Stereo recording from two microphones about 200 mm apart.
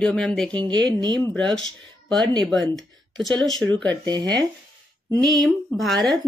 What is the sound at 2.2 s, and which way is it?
Speech, 20° right (ahead or behind).